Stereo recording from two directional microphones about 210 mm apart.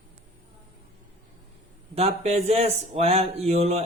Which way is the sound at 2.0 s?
30° right (ahead or behind).